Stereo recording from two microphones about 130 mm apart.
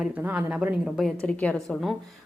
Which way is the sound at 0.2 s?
10° right (ahead or behind).